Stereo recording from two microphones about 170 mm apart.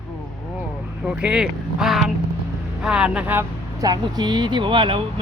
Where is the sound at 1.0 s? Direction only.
5° right (ahead or behind).